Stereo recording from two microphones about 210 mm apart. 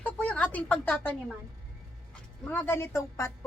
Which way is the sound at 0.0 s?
5° left (ahead or behind).